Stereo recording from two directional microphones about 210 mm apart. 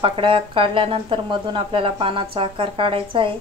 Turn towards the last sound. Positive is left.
turn(degrees=-25)  # may be behind; listen again after turning